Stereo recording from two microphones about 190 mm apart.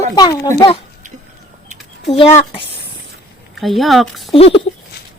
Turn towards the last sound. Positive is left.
turn(degrees=30)  # may be behind; listen again after turning